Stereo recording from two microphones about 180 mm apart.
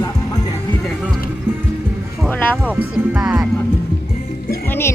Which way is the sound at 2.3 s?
10° left (ahead or behind).